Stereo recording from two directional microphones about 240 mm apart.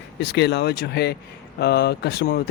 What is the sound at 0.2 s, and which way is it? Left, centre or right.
Speech, left.